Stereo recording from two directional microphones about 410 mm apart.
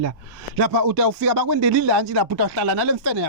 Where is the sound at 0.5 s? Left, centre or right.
Right.